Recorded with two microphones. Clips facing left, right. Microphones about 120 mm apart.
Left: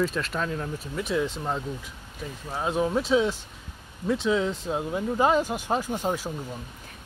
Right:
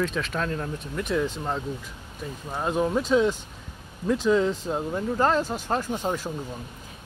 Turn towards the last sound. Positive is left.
turn(degrees=10)  # may be behind; listen again after turning